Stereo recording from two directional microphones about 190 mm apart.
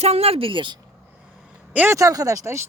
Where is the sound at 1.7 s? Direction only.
15° right (ahead or behind).